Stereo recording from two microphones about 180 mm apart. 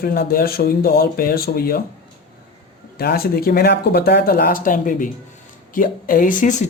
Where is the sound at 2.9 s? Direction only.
60° left (ahead or behind).